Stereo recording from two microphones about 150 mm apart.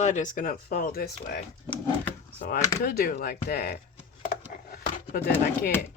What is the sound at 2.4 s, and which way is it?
Speech, 75° left (ahead or behind).